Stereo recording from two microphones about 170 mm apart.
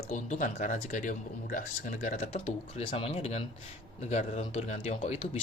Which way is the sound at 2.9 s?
30° left (ahead or behind).